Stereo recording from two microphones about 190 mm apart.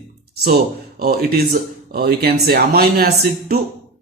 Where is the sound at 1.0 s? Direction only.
55° right (ahead or behind).